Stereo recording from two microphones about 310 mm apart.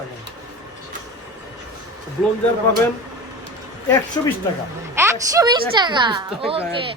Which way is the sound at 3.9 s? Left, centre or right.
Centre.